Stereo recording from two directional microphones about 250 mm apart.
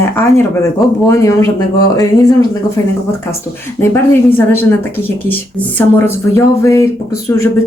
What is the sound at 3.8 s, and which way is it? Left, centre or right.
Speech, centre.